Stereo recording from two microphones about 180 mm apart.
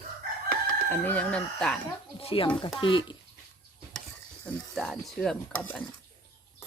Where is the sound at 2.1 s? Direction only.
30° left (ahead or behind).